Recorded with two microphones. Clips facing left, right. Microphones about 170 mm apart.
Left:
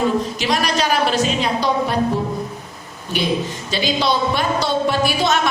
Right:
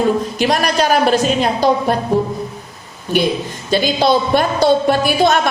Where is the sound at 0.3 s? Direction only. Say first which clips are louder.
Right 4 dB; 50° right (ahead or behind).